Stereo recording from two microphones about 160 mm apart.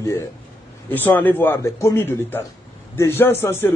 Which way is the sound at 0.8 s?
10° left (ahead or behind).